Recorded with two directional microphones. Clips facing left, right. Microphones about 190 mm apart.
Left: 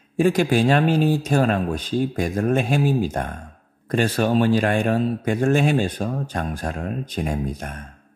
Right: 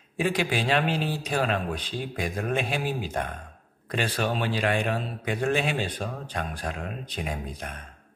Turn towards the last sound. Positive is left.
turn(degrees=45)  # may be behind; listen again after turning